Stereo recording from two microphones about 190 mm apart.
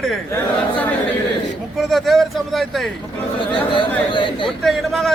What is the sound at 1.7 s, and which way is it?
A man's voice, centre (ahead or behind).